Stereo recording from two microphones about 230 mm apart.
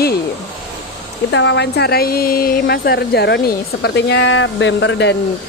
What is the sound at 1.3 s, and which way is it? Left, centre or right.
Speech, left.